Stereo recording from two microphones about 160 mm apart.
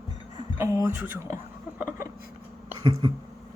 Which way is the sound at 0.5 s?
20° right (ahead or behind).